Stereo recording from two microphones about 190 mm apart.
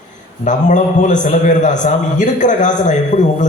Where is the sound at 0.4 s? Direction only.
40° left (ahead or behind).